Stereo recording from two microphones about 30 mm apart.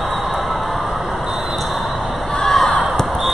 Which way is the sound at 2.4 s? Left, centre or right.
Centre.